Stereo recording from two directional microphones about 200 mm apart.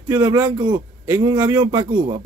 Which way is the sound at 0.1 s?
20° right (ahead or behind).